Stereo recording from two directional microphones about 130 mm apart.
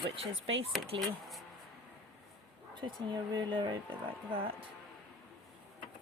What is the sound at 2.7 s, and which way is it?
Speech, 35° right (ahead or behind).